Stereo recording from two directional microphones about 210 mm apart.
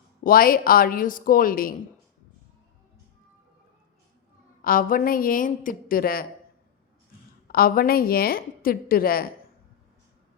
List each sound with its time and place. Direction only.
0.2 s a woman's voice: 45° left (ahead or behind)
4.6 s a woman's voice: 40° left (ahead or behind)
7.4 s a woman's voice: 45° left (ahead or behind)